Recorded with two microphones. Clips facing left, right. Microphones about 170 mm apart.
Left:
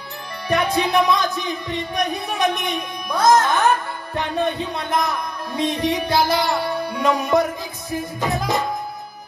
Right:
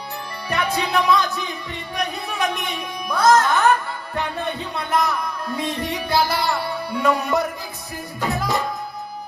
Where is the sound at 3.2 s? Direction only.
20° left (ahead or behind).